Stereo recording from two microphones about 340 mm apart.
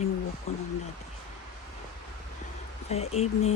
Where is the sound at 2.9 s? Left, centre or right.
Centre.